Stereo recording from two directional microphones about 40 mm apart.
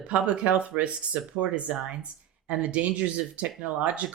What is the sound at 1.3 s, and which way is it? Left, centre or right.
Speech, centre.